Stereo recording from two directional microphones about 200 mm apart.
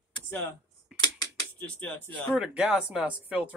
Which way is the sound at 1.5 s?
5° left (ahead or behind).